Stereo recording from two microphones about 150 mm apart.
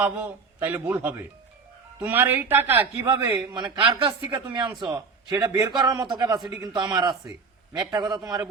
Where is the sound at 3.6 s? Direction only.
30° right (ahead or behind).